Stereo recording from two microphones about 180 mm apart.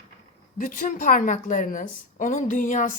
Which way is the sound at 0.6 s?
45° left (ahead or behind).